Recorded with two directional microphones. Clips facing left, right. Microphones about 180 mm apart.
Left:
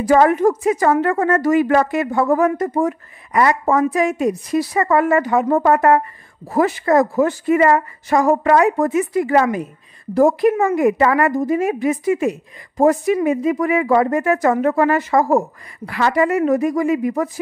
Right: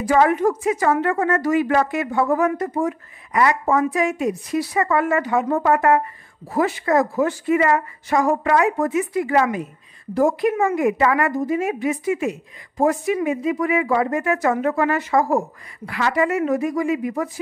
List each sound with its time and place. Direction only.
0.0 s a woman's voice: 45° left (ahead or behind)